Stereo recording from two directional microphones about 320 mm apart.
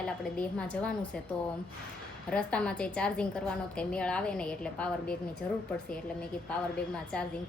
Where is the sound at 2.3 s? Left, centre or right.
Centre.